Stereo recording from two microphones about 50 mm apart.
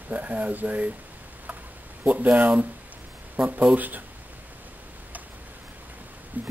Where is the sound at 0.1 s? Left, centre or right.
Right.